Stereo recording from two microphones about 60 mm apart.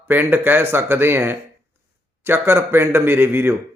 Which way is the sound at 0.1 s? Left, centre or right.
Right.